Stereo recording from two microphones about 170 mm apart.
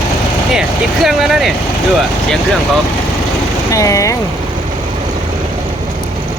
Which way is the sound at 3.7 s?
20° left (ahead or behind).